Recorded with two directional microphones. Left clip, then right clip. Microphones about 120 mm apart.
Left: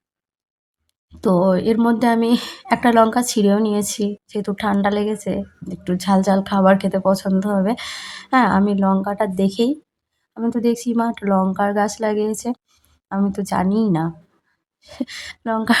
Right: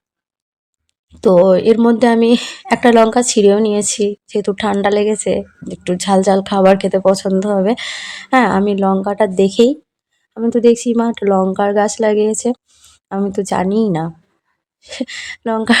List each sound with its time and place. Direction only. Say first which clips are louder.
1.1 s speech: right 8 dB; 25° right (ahead or behind)